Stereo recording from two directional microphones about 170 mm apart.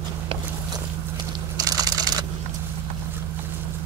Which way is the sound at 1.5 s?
20° right (ahead or behind).